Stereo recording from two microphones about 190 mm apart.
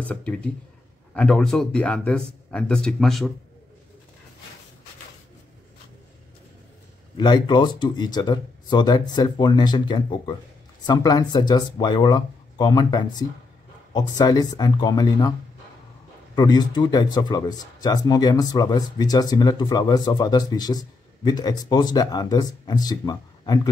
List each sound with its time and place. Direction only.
0.0 s speech: 5° left (ahead or behind)
7.2 s speech: 25° left (ahead or behind)
16.3 s speech: 20° left (ahead or behind)